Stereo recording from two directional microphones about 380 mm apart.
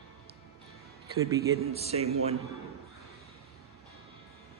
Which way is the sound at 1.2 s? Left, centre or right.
Centre.